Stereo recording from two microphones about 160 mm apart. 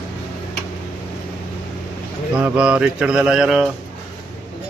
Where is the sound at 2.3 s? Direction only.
10° right (ahead or behind).